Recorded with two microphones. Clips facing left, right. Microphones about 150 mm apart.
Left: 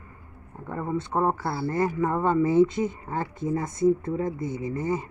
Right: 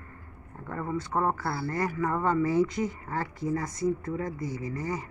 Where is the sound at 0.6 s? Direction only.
20° left (ahead or behind).